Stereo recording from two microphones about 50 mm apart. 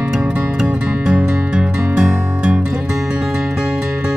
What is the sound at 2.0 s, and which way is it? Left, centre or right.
Music, centre.